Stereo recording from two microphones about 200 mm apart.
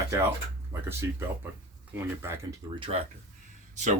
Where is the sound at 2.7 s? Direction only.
25° right (ahead or behind).